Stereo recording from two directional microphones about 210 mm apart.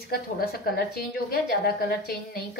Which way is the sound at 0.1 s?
45° left (ahead or behind).